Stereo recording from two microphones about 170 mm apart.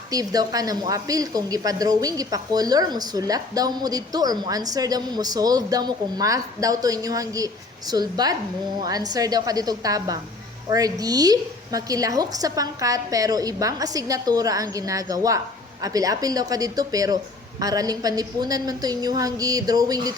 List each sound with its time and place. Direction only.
0.1 s a woman's voice: 20° right (ahead or behind)